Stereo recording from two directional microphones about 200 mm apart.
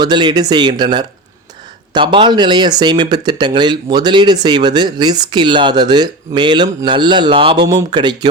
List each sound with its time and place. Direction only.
0.0 s speech: 20° right (ahead or behind)